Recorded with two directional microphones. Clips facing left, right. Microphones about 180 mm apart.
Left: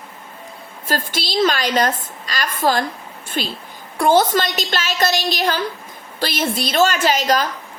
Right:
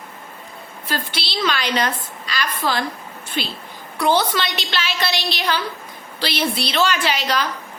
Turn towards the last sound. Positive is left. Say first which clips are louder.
# left 4 dB
turn(degrees=45)  # may be behind; listen again after turning